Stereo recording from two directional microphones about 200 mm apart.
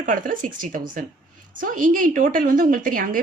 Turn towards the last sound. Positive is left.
turn(degrees=-45)  # may be behind; listen again after turning